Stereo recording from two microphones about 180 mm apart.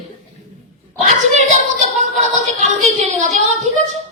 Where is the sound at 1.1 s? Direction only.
40° right (ahead or behind).